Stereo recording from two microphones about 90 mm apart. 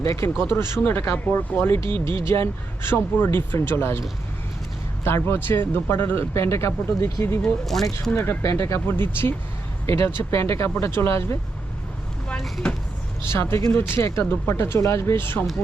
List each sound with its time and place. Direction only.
0.2 s speech: 25° left (ahead or behind)
1.8 s speech: 65° right (ahead or behind)
2.1 s speech: 30° left (ahead or behind)
5.0 s speech: 25° left (ahead or behind)
7.6 s speech: 5° left (ahead or behind)
8.1 s speech: 25° left (ahead or behind)
12.3 s speech: 5° left (ahead or behind)
13.2 s speech: 30° left (ahead or behind)